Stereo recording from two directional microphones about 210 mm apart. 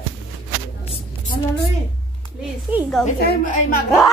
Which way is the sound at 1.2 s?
45° left (ahead or behind).